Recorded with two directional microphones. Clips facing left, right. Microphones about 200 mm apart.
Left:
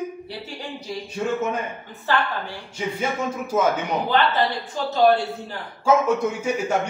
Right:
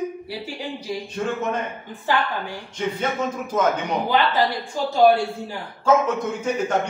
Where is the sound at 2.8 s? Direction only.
10° left (ahead or behind).